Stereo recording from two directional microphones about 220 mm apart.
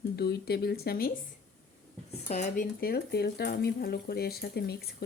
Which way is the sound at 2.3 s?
30° left (ahead or behind).